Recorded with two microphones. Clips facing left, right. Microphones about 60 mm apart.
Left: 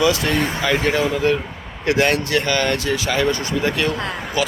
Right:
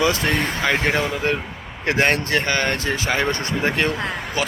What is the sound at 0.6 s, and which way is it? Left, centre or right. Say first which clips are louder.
Speech: even; right.